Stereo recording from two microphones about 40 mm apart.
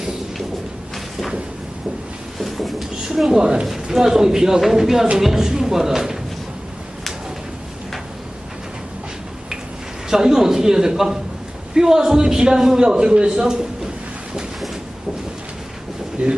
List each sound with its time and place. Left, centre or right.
2.4 s a sound: centre
3.2 s a man's voice: centre
10.1 s a man's voice: centre
16.2 s speech: right